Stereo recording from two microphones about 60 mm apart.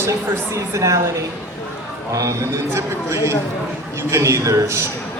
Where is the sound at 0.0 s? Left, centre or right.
Right.